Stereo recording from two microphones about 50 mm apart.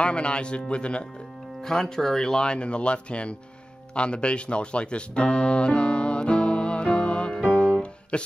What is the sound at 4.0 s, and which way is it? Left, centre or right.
Music, left.